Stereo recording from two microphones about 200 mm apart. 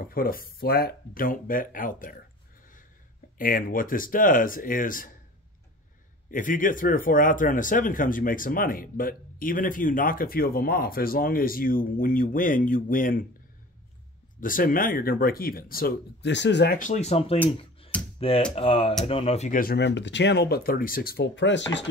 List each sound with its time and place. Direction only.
0.0 s speech: 45° left (ahead or behind)
3.3 s speech: 45° left (ahead or behind)
6.3 s speech: 40° left (ahead or behind)
14.4 s speech: 45° left (ahead or behind); by 16.7 s 60° left (ahead or behind)
16.7 s speech: 35° left (ahead or behind)
17.9 s computer keyboard: 5° left (ahead or behind)
18.5 s speech: 30° left (ahead or behind); by 21.8 s 65° left (ahead or behind)